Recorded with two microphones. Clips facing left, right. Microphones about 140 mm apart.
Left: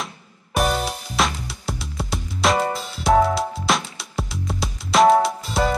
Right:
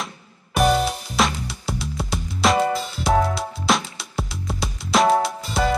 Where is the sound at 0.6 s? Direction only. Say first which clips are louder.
Right 3 dB; centre (ahead or behind).